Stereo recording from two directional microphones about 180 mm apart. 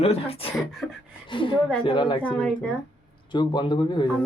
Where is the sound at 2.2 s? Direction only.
5° left (ahead or behind).